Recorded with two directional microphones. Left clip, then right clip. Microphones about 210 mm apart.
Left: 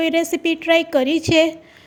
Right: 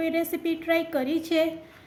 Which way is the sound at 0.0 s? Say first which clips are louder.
Left 8 dB; 40° left (ahead or behind).